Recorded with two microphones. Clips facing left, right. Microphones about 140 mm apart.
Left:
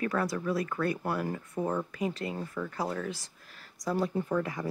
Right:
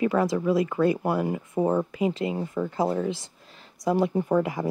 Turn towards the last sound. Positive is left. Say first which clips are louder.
# right 7 dB
turn(degrees=-25)  # may be behind; listen again after turning